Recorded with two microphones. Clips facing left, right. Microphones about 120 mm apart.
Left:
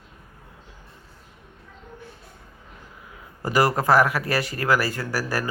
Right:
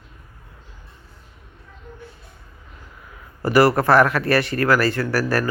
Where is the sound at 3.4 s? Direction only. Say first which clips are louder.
Right 5 dB; 15° left (ahead or behind).